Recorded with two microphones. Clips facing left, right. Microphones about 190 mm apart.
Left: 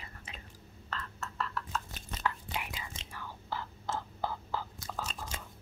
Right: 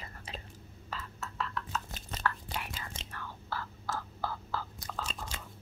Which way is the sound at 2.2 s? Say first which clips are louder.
Even; 15° left (ahead or behind).